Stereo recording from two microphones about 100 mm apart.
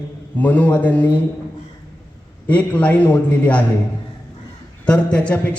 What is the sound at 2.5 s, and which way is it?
A man's voice, 15° left (ahead or behind).